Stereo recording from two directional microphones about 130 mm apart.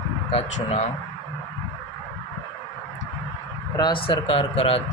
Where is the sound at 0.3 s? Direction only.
50° left (ahead or behind).